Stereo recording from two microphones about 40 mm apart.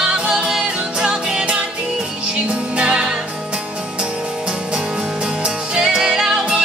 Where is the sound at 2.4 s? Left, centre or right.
Right.